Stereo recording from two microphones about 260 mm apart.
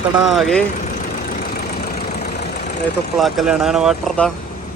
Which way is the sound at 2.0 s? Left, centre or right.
Left.